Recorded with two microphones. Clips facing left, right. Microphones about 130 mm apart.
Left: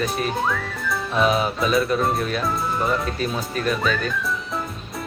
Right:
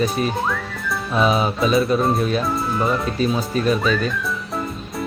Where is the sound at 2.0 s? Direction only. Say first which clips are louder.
Right 3 dB; centre (ahead or behind).